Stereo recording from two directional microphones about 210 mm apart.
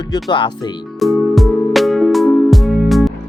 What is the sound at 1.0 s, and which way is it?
Music, centre (ahead or behind).